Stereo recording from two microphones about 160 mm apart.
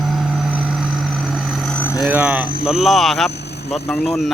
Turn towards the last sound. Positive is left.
turn(degrees=0)  # may be behind; listen again after turning